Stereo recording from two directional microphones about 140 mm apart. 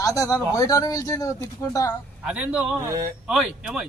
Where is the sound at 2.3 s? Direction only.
5° right (ahead or behind).